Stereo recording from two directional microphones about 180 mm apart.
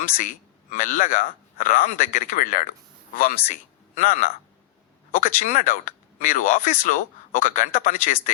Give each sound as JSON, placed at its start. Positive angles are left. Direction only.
{"t": 0.2, "sound": "speech", "side_deg": 45}